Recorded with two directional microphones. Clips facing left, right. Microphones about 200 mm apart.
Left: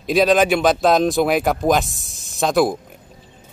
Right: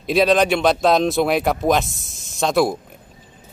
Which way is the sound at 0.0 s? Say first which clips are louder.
Left 1 dB; centre (ahead or behind).